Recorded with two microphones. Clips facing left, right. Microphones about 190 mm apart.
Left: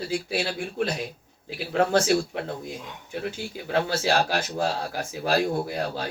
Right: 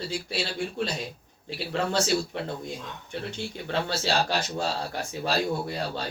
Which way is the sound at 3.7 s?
55° left (ahead or behind).